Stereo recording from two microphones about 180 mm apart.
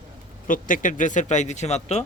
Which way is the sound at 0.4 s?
50° left (ahead or behind).